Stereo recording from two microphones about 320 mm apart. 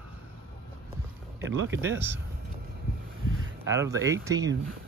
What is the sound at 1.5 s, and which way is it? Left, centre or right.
Speech, right.